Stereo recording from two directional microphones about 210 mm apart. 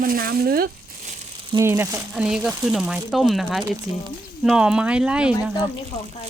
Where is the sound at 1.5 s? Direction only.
15° right (ahead or behind).